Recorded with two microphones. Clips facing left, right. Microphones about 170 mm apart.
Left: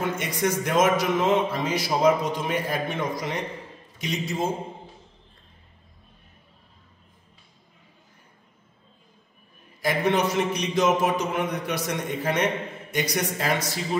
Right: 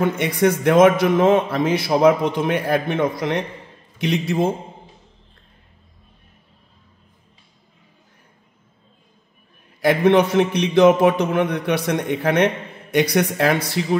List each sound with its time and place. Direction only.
0.0 s speech: 60° right (ahead or behind)
9.8 s speech: 60° right (ahead or behind)